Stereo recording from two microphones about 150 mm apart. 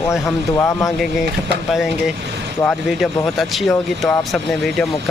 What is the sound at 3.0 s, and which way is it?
Speech, centre (ahead or behind).